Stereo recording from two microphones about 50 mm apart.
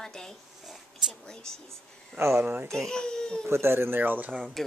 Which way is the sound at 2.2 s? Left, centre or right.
Right.